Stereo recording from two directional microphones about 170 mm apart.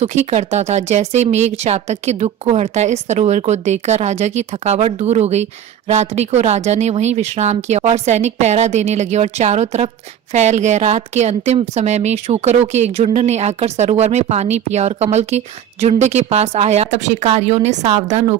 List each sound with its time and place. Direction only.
0.0 s speech: 40° right (ahead or behind)